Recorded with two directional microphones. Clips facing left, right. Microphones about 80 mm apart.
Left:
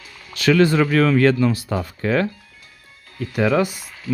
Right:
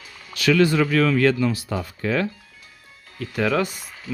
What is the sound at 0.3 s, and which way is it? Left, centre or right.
Speech, left.